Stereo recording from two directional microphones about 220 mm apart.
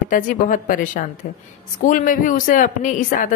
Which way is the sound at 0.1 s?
40° left (ahead or behind).